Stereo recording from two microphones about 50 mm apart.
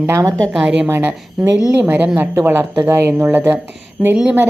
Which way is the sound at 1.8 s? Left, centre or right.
Right.